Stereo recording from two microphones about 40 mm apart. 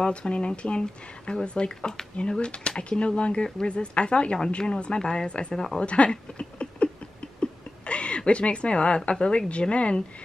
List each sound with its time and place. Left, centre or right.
0.0 s speech: left
7.3 s a sound: left
8.3 s speech: left